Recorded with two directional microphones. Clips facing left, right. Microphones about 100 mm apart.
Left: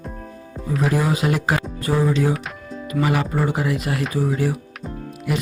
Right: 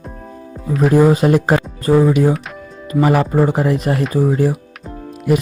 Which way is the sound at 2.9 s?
40° right (ahead or behind).